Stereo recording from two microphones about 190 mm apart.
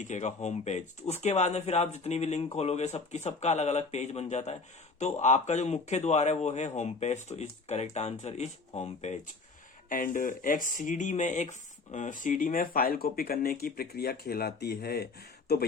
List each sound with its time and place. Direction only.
0.0 s a man's voice: 40° left (ahead or behind); by 15.0 s 55° left (ahead or behind)